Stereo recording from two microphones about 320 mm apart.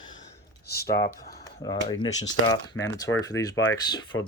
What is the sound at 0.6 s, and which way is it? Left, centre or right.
Speech, left.